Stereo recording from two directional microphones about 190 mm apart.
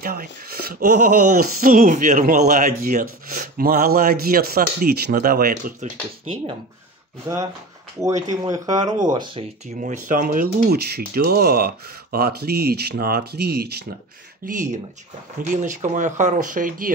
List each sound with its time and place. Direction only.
0.0 s speech: 50° right (ahead or behind)
8.3 s speech: 20° right (ahead or behind)
9.8 s speech: 45° right (ahead or behind)
14.4 s speech: 40° right (ahead or behind)